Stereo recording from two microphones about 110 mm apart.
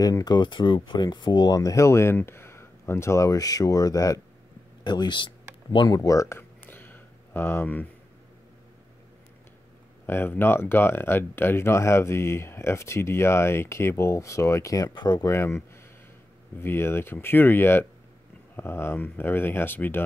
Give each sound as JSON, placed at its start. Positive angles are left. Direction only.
{"t": 0.0, "sound": "speech", "side_deg": 35}
{"t": 4.8, "sound": "speech", "side_deg": 45}
{"t": 5.9, "sound": "a sound", "side_deg": 30}
{"t": 10.0, "sound": "speech", "side_deg": 20}
{"t": 15.3, "sound": "speech", "side_deg": 25}